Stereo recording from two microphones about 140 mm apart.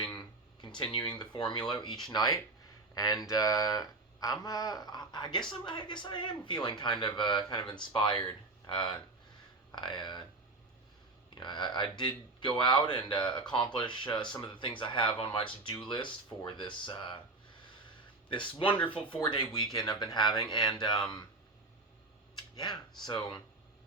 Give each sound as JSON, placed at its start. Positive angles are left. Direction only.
{"t": 0.6, "sound": "speech", "side_deg": 35}
{"t": 11.3, "sound": "speech", "side_deg": 35}
{"t": 18.3, "sound": "speech", "side_deg": 35}
{"t": 22.5, "sound": "speech", "side_deg": 30}